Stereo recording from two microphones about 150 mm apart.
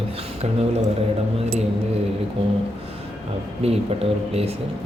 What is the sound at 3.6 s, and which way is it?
Speech, 45° right (ahead or behind).